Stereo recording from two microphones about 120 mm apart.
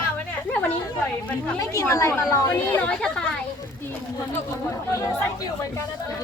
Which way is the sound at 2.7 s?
10° left (ahead or behind).